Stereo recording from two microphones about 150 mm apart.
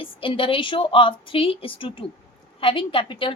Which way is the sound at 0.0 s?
35° left (ahead or behind).